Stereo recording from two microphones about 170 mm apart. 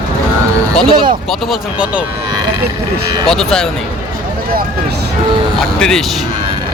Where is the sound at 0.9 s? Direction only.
30° right (ahead or behind).